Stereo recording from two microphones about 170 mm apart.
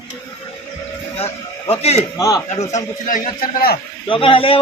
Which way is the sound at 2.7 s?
50° left (ahead or behind).